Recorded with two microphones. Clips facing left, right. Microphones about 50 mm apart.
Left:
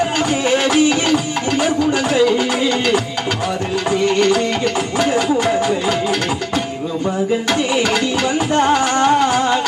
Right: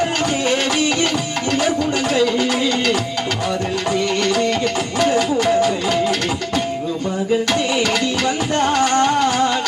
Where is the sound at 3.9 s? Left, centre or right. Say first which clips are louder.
Left 5 dB; centre.